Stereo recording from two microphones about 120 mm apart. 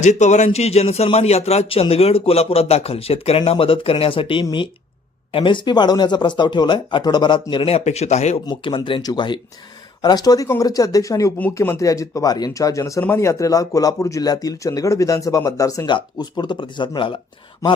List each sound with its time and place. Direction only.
0.0 s a man's voice: 75° left (ahead or behind); by 7.4 s 40° left (ahead or behind)
7.5 s a man's voice: 55° left (ahead or behind)
8.4 s speech: 40° left (ahead or behind)
15.9 s speech: 40° left (ahead or behind)